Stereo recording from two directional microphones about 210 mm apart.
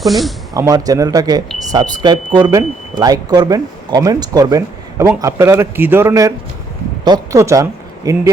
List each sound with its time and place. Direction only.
0.0 s speech: centre (ahead or behind)
0.5 s speech: 15° right (ahead or behind)